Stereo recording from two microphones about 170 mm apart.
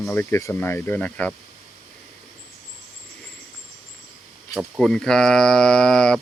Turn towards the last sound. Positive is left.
turn(degrees=5)  # may be behind; listen again after turning